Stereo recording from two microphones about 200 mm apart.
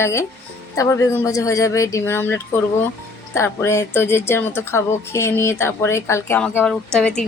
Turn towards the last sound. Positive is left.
turn(degrees=5)  # may be behind; listen again after turning